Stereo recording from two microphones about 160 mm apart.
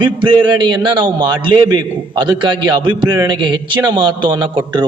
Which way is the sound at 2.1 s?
30° right (ahead or behind).